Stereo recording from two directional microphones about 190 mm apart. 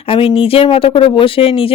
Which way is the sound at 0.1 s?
30° left (ahead or behind).